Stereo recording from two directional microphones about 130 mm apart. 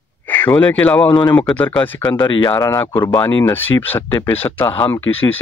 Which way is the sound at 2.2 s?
35° left (ahead or behind).